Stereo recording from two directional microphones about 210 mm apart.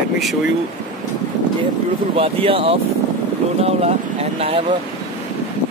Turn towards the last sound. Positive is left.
turn(degrees=-30)  # may be behind; listen again after turning